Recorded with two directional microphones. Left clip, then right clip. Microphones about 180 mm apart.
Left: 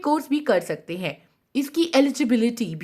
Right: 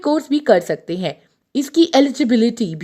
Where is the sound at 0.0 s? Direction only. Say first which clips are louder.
Right 5 dB; 25° right (ahead or behind).